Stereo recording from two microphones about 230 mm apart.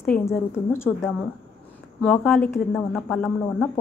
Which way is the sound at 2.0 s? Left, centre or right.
Centre.